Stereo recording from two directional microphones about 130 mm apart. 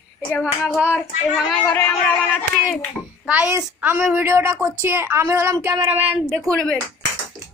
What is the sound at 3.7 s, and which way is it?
A woman's voice, 15° right (ahead or behind).